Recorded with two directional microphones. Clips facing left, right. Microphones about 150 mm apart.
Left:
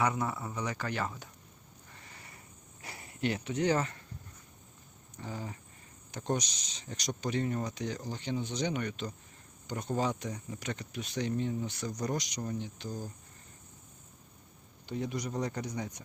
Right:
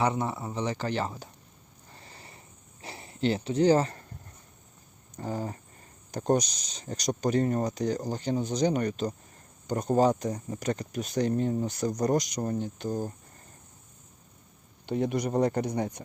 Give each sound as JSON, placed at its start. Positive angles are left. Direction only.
{"t": 0.0, "sound": "speech", "side_deg": -25}
{"t": 1.9, "sound": "a sound", "side_deg": -30}
{"t": 2.8, "sound": "speech", "side_deg": -30}
{"t": 5.1, "sound": "speech", "side_deg": -40}
{"t": 14.8, "sound": "speech", "side_deg": -60}